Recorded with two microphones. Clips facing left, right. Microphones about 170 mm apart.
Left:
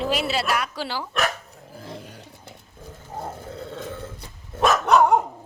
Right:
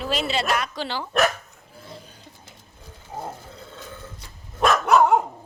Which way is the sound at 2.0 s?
75° left (ahead or behind).